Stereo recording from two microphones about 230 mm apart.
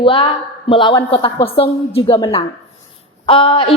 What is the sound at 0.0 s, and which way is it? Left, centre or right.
A woman's voice, left.